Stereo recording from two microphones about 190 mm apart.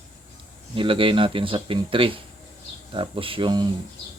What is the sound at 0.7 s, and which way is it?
Speech, 25° right (ahead or behind).